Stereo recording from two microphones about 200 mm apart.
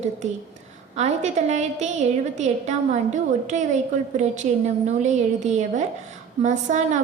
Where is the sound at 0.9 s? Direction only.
35° right (ahead or behind).